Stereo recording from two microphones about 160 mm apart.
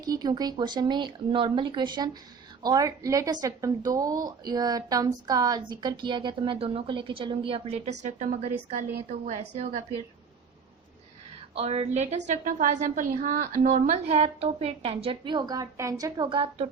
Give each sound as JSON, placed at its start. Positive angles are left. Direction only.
{"t": 0.0, "sound": "a woman's voice", "side_deg": -25}
{"t": 11.5, "sound": "a woman's voice", "side_deg": -45}